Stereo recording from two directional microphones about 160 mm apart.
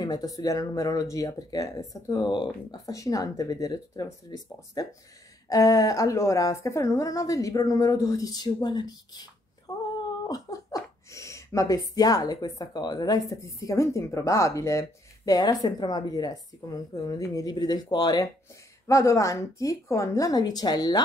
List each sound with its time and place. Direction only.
0.0 s speech: 25° left (ahead or behind)
9.7 s a sound: 25° left (ahead or behind)
10.2 s speech: 20° left (ahead or behind)